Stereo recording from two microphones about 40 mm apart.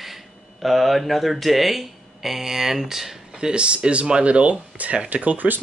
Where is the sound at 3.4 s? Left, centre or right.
Right.